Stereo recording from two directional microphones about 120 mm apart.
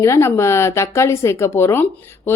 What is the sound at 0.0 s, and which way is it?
Speech, 25° left (ahead or behind).